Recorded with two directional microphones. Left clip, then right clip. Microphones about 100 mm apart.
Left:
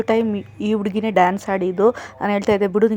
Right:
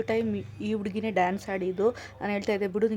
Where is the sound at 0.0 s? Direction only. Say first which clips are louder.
Left 9 dB; 35° left (ahead or behind).